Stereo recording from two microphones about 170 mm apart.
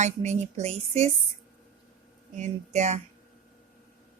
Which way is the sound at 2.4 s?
40° right (ahead or behind).